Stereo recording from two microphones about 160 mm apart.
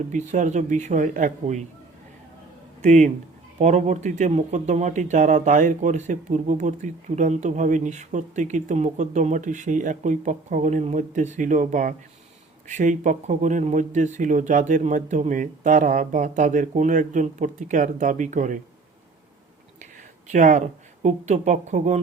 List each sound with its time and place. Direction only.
0.1 s speech: 50° right (ahead or behind)
2.8 s speech: 50° right (ahead or behind)
19.8 s speech: 50° right (ahead or behind)